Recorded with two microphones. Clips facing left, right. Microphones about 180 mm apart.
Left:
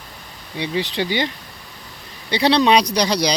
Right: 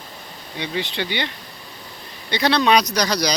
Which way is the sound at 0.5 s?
30° left (ahead or behind).